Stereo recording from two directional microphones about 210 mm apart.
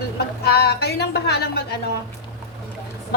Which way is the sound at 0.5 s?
50° left (ahead or behind).